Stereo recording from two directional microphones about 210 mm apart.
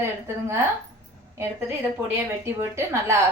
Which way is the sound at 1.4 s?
10° right (ahead or behind).